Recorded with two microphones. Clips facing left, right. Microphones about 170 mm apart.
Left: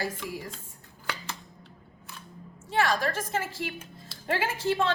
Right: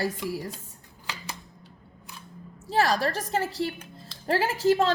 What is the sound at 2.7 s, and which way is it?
A woman's voice, 35° right (ahead or behind).